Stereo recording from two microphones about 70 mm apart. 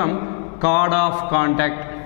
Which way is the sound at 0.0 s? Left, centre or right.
Centre.